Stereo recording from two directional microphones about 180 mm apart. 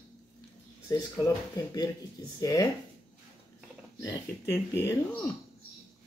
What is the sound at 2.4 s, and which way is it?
Speech, 20° left (ahead or behind).